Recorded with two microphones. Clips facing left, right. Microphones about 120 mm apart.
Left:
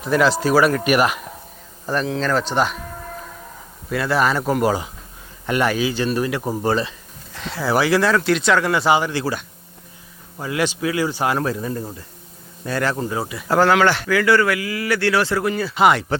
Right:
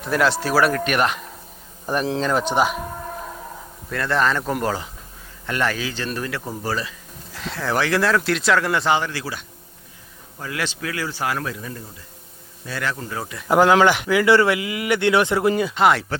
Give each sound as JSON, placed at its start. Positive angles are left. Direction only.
{"t": 0.0, "sound": "speech", "side_deg": 0}
{"t": 1.9, "sound": "speech", "side_deg": -15}
{"t": 3.8, "sound": "speech", "side_deg": 5}
{"t": 7.3, "sound": "speech", "side_deg": 0}
{"t": 10.3, "sound": "speech", "side_deg": 20}
{"t": 11.4, "sound": "a man's voice", "side_deg": 35}
{"t": 13.0, "sound": "speech", "side_deg": 20}
{"t": 13.2, "sound": "speech", "side_deg": 5}
{"t": 13.5, "sound": "speech", "side_deg": -15}
{"t": 15.7, "sound": "speech", "side_deg": 0}